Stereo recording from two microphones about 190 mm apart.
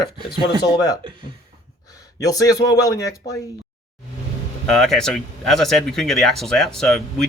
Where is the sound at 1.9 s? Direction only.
20° left (ahead or behind).